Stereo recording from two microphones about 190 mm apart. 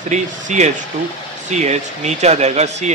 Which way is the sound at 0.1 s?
40° right (ahead or behind).